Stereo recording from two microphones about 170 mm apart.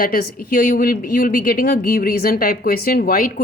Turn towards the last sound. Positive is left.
turn(degrees=60)  # may be behind; listen again after turning